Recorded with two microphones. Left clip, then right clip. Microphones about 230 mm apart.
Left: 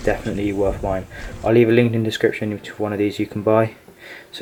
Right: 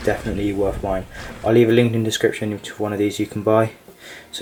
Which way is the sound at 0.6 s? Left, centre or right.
Left.